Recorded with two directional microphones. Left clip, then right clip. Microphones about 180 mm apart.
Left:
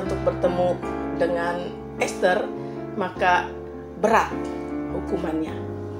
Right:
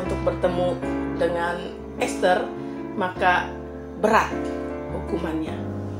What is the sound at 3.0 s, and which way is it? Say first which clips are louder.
Speech: even; 35° left (ahead or behind).